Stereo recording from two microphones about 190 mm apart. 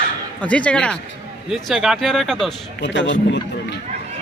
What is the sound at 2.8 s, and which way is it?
Speech, 70° left (ahead or behind).